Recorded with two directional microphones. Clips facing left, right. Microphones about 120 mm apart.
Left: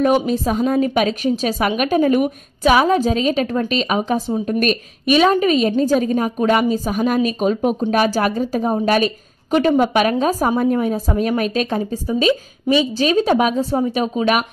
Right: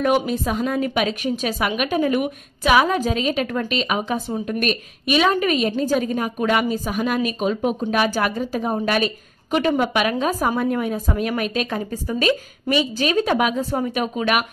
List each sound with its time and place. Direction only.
0.3 s a woman's voice: 35° left (ahead or behind)